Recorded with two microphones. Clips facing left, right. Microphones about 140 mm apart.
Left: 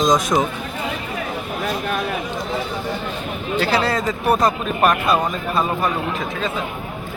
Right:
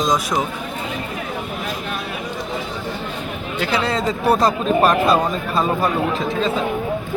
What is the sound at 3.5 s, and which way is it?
Speech, 20° right (ahead or behind).